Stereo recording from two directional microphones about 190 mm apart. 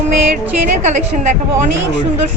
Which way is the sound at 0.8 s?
40° right (ahead or behind).